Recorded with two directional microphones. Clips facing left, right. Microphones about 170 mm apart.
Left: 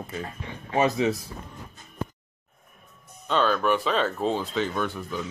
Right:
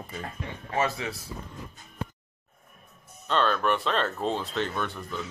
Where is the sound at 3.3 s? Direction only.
Centre (ahead or behind).